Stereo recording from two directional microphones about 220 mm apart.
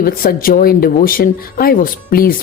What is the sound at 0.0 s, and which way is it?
Speech, 40° left (ahead or behind).